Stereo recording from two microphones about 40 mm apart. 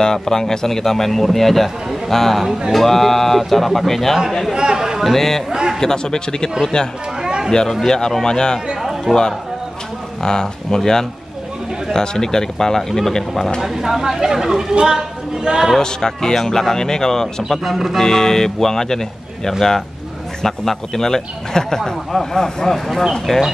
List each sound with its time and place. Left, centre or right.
0.0 s a man's voice: centre
4.6 s a sound: centre
5.0 s a man's voice: centre
5.5 s a sound: centre
5.8 s a man's voice: centre
7.2 s a sound: centre
7.7 s a man's voice: centre
9.1 s speech: centre
10.2 s a man's voice: centre
13.6 s speech: centre
15.8 s a man's voice: centre
17.6 s speech: centre
17.9 s a man's voice: centre
22.8 s speech: centre